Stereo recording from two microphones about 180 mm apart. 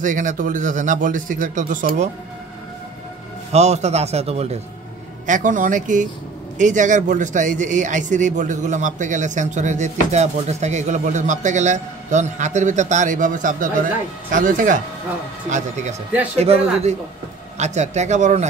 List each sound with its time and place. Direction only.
0.0 s a man's voice: 45° right (ahead or behind)
3.5 s a man's voice: 40° right (ahead or behind)